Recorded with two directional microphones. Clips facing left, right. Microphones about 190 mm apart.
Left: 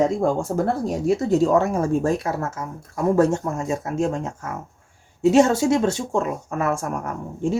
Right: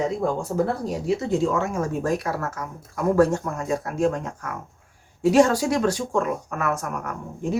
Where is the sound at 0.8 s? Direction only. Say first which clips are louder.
Left 4 dB; 40° left (ahead or behind).